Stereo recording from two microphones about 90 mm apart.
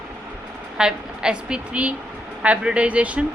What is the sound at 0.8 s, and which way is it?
Speech, 10° right (ahead or behind).